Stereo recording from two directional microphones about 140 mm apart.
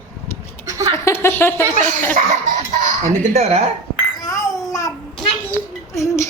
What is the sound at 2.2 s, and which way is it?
Speech, 65° right (ahead or behind).